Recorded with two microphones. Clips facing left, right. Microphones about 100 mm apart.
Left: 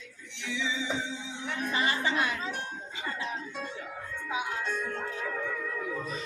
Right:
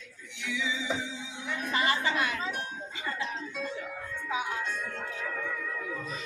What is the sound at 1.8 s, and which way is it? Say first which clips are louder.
Music: even; 25° left (ahead or behind).